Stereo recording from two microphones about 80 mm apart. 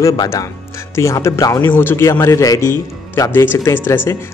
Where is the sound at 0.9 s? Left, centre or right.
Left.